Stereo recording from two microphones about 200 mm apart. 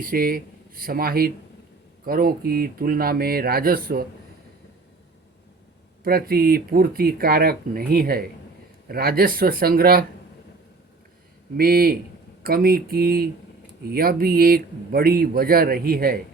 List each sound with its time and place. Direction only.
0.0 s speech: 45° right (ahead or behind)
6.0 s speech: 50° right (ahead or behind)
11.5 s speech: 50° right (ahead or behind)